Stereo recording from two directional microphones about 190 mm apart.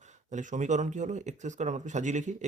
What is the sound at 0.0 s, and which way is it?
Speech, 40° right (ahead or behind).